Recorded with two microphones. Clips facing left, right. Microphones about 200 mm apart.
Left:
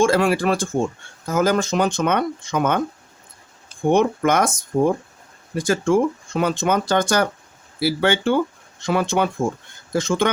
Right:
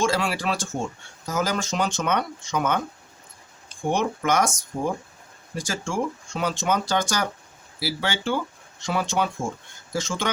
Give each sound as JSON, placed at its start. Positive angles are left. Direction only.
{"t": 0.0, "sound": "speech", "side_deg": 55}
{"t": 3.8, "sound": "speech", "side_deg": 55}